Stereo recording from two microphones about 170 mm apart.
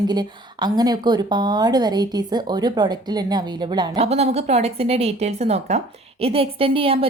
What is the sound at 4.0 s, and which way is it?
A woman's voice, 40° right (ahead or behind).